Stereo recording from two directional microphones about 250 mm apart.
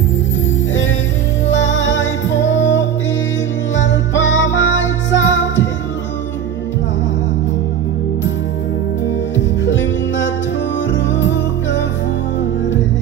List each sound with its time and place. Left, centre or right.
1.5 s music: left
9.7 s music: left